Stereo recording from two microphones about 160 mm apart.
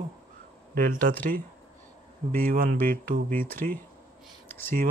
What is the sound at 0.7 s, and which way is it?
Speech, 60° right (ahead or behind).